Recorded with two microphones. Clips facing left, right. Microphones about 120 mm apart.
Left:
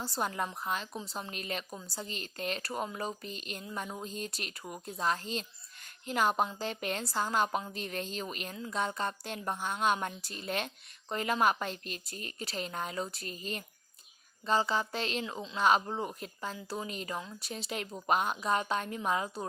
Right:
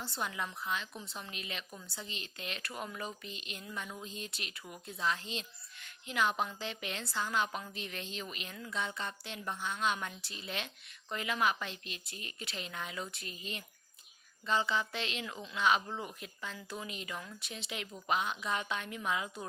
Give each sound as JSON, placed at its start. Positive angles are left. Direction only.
{"t": 0.0, "sound": "speech", "side_deg": 40}
{"t": 15.5, "sound": "speech", "side_deg": 40}